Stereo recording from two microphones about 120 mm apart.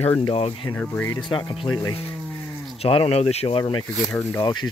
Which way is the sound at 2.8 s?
55° left (ahead or behind).